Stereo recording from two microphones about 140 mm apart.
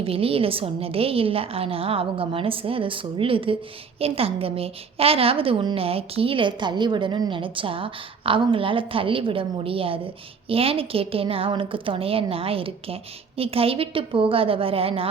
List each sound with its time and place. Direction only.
0.0 s a woman's voice: 45° right (ahead or behind)